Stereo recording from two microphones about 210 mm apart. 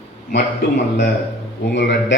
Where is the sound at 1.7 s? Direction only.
55° left (ahead or behind).